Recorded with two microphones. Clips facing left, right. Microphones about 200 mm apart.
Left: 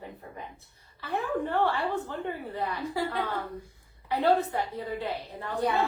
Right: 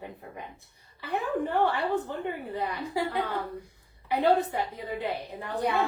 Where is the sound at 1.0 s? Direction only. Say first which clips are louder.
Right 1 dB; 15° right (ahead or behind).